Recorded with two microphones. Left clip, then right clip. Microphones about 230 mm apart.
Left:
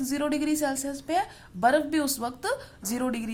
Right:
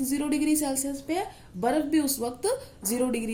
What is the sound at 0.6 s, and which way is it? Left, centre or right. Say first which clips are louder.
Speech: left 1 dB; left.